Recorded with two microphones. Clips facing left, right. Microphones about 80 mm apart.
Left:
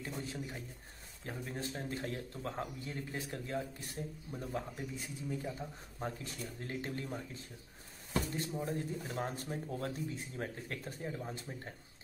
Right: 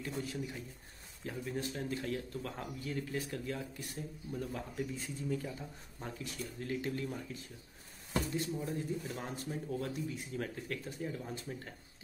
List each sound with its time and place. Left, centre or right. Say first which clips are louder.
0.2 s speech: right 2 dB; left
5.9 s speech: left 1 dB; left
8.6 s speech: right 1 dB; left